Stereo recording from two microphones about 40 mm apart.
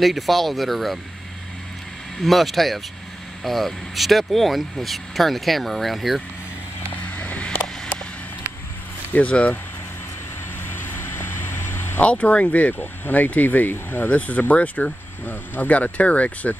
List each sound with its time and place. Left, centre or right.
0.0 s speech: centre
2.1 s speech: centre
7.1 s vehicle: left
9.1 s speech: left
10.7 s vehicle: left
12.0 s speech: left
14.0 s speech: left